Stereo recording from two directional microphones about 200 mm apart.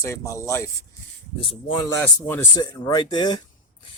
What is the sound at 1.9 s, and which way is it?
Speech, 10° left (ahead or behind).